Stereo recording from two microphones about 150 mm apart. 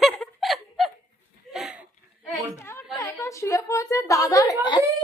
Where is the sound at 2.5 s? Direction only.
15° left (ahead or behind).